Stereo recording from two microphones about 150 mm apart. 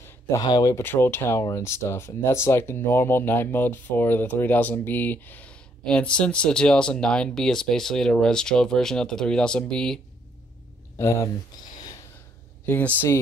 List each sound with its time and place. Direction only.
0.4 s speech: 25° left (ahead or behind); by 9.9 s 5° left (ahead or behind)
11.0 s speech: 20° left (ahead or behind)
12.6 s speech: 10° left (ahead or behind)